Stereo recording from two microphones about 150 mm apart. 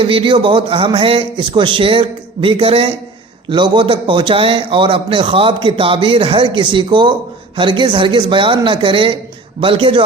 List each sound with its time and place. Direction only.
0.0 s a man's voice: 35° right (ahead or behind)